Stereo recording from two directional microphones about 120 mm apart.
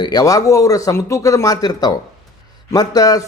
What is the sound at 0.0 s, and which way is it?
A man's voice, 35° left (ahead or behind).